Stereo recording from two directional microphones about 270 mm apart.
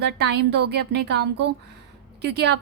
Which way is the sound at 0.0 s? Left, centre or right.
Right.